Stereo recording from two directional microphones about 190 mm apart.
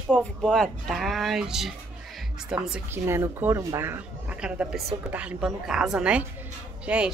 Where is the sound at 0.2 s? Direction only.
5° left (ahead or behind).